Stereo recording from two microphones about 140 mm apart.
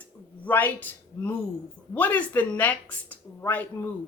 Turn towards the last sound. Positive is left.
turn(degrees=15)  # may be behind; listen again after turning